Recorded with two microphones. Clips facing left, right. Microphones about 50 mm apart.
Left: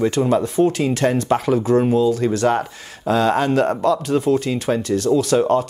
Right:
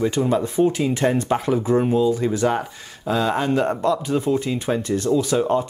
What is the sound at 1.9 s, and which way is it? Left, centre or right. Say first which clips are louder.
Speech: left 2 dB; centre.